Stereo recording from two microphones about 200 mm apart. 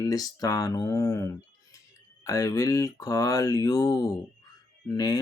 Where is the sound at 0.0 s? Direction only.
20° left (ahead or behind).